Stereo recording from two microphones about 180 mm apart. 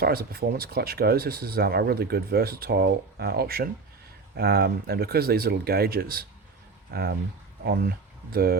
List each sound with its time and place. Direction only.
0.0 s speech: 55° right (ahead or behind)